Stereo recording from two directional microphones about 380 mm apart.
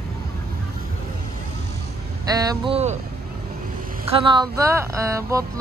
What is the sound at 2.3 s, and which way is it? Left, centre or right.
Speech, centre.